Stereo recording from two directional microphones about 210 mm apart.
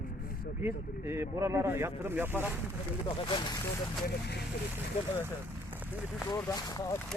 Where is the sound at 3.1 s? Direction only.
20° left (ahead or behind).